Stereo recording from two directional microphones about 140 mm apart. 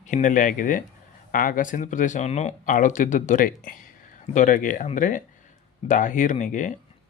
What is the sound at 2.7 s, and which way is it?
Speech, 70° left (ahead or behind).